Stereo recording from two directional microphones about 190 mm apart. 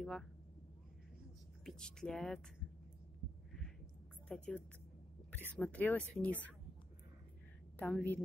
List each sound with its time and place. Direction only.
0.0 s speech: centre (ahead or behind)
1.6 s speech: 5° left (ahead or behind)
4.3 s a woman's voice: 5° left (ahead or behind)
7.7 s a woman's voice: 5° left (ahead or behind)